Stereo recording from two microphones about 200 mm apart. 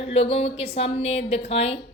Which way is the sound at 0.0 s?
30° left (ahead or behind).